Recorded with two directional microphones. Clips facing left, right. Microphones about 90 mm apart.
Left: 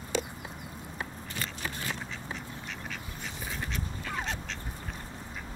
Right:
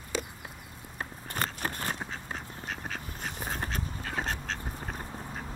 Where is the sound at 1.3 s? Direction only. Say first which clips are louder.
Right 7 dB; 50° right (ahead or behind).